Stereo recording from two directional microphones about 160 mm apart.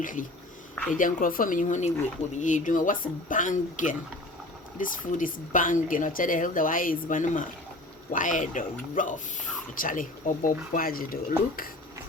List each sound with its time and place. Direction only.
0.0 s speech: 55° left (ahead or behind)